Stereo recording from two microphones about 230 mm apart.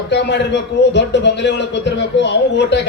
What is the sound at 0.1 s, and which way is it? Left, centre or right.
A man's voice, left.